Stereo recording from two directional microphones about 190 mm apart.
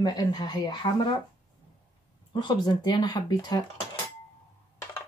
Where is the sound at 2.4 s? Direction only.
20° left (ahead or behind).